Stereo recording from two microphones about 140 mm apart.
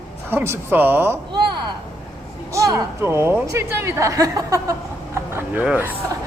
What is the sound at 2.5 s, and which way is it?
Speech, 20° right (ahead or behind).